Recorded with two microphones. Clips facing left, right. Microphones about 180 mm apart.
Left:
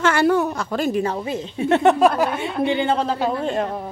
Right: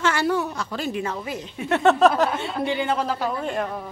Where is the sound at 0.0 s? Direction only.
55° left (ahead or behind).